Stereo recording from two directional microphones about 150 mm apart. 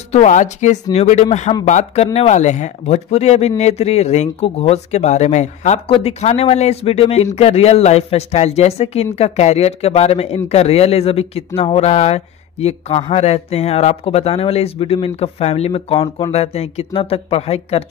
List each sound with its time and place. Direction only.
0.1 s speech: 50° left (ahead or behind)